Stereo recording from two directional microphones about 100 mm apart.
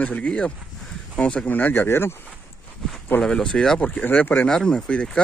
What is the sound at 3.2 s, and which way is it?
Speech, 10° left (ahead or behind).